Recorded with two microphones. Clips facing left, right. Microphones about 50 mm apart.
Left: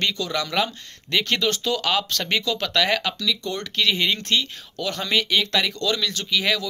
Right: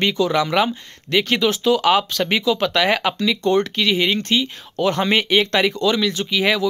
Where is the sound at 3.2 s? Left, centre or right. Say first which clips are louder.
Right 9 dB; right.